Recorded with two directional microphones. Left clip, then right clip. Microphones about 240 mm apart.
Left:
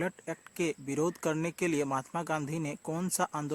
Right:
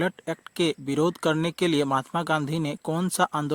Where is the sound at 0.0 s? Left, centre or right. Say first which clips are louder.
Right 8 dB; right.